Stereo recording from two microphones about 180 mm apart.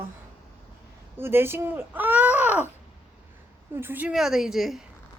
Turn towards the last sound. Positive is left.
turn(degrees=0)  # may be behind; listen again after turning